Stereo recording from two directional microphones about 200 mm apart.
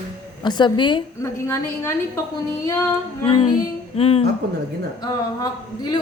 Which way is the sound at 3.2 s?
30° left (ahead or behind).